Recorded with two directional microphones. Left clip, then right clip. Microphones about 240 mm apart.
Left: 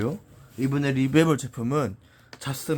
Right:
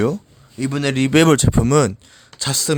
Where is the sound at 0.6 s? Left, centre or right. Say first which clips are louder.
Right 6 dB; right.